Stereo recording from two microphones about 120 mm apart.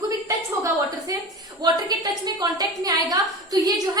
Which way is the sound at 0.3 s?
25° right (ahead or behind).